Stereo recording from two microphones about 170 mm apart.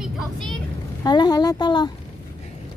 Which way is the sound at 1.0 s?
25° left (ahead or behind).